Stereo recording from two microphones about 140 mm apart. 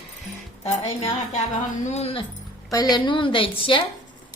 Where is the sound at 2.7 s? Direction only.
25° left (ahead or behind).